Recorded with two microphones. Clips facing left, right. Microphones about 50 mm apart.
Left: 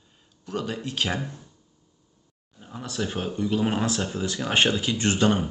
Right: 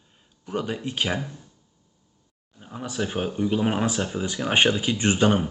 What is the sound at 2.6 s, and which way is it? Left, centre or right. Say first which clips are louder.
Speech: right 1 dB; centre.